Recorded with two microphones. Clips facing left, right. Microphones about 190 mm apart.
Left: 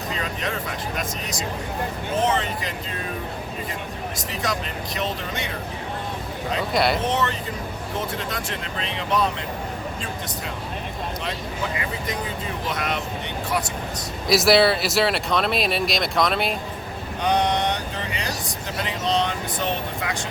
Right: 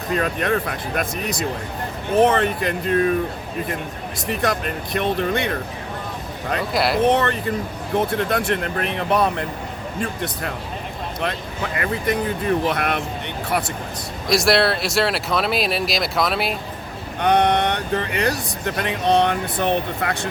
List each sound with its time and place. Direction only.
0.1 s speech: 55° right (ahead or behind)
4.3 s speech: 55° right (ahead or behind)
6.7 s speech: centre (ahead or behind)
7.0 s speech: 60° right (ahead or behind)
11.2 s speech: 60° right (ahead or behind)
14.3 s speech: centre (ahead or behind)
17.2 s speech: 60° right (ahead or behind)